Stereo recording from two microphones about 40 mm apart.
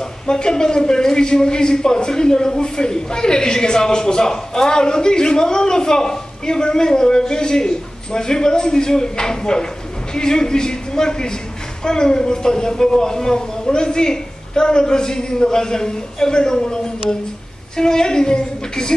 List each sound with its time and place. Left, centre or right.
0.3 s a man's voice: centre